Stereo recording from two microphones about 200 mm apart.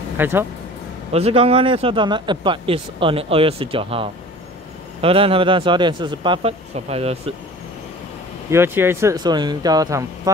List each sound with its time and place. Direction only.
0.2 s speech: 10° right (ahead or behind)
1.1 s speech: 30° right (ahead or behind)
8.5 s speech: 10° right (ahead or behind)